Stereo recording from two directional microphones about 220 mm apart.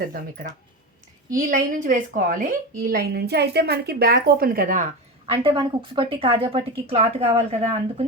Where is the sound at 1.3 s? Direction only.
35° right (ahead or behind).